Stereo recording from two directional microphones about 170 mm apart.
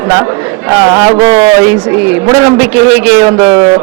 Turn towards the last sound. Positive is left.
turn(degrees=-35)  # may be behind; listen again after turning